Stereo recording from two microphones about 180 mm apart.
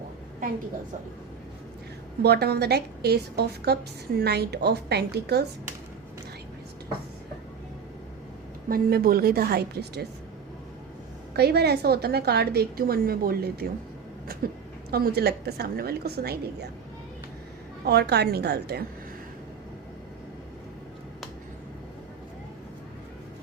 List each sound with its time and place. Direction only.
2.2 s a woman's voice: 65° right (ahead or behind)
8.7 s a woman's voice: 55° right (ahead or behind)
11.3 s a woman's voice: 65° right (ahead or behind)
17.8 s a woman's voice: 65° right (ahead or behind)